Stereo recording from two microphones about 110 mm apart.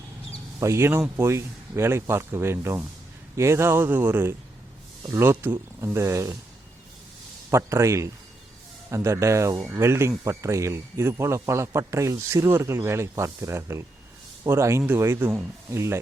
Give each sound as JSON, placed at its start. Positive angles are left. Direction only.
{"t": 0.6, "sound": "a man's voice", "side_deg": -25}
{"t": 7.5, "sound": "a man's voice", "side_deg": -25}